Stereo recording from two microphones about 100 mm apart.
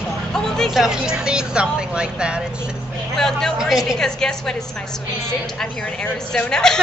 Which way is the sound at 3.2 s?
5° left (ahead or behind).